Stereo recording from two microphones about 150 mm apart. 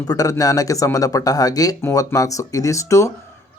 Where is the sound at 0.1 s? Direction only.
25° left (ahead or behind).